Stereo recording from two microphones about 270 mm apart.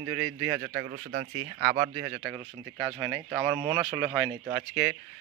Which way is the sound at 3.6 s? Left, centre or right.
Centre.